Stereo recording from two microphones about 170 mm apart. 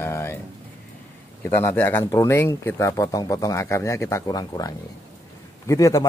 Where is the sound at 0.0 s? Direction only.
15° left (ahead or behind).